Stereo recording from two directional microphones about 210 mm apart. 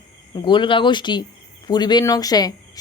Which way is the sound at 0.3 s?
20° left (ahead or behind).